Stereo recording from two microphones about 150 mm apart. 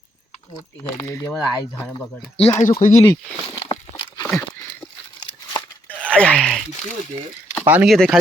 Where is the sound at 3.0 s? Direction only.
30° left (ahead or behind).